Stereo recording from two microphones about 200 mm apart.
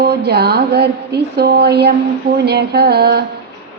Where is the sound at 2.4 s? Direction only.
55° right (ahead or behind).